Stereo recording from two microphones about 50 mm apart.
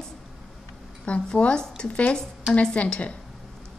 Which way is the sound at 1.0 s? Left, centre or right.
Left.